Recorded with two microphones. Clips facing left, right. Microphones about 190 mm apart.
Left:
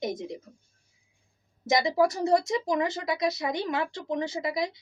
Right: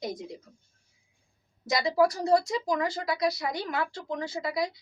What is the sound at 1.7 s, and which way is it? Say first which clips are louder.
Speech: left 1 dB; 20° left (ahead or behind).